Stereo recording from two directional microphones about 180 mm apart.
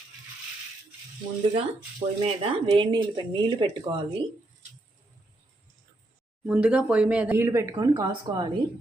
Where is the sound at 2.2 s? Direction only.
30° right (ahead or behind).